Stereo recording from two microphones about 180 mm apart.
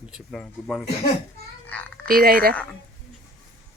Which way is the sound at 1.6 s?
10° left (ahead or behind).